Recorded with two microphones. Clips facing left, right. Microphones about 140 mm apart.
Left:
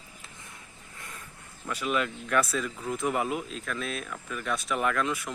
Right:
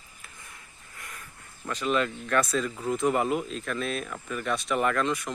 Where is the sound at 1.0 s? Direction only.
25° left (ahead or behind).